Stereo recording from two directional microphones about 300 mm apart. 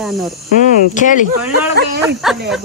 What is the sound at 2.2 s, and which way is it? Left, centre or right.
Speech, centre.